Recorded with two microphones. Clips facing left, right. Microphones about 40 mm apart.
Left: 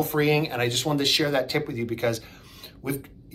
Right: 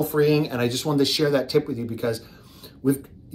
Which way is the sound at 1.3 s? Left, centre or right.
Left.